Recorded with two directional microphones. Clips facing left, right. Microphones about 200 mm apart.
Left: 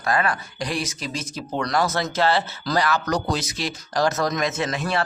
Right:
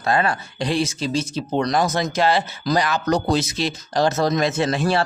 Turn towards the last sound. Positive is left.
turn(degrees=-30)  # may be behind; listen again after turning